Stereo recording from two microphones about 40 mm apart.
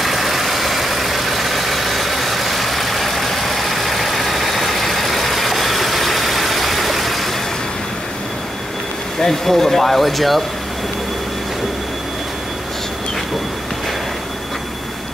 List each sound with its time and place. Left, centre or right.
0.0 s vehicle: centre
9.2 s speech: centre